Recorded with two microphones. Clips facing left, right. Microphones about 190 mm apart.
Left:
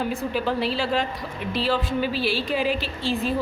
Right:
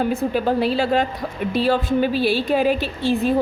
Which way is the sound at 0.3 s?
45° right (ahead or behind).